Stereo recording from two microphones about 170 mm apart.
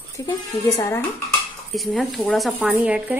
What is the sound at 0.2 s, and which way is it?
Speech, 20° left (ahead or behind).